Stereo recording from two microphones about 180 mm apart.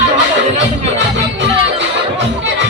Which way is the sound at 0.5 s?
85° right.